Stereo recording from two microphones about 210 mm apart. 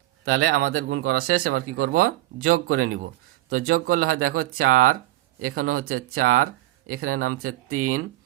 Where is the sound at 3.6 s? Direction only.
90° right.